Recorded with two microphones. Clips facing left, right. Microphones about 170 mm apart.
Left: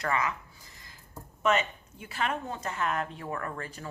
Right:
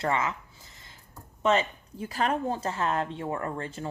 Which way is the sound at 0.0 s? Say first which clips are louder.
Right 2 dB; 25° right (ahead or behind).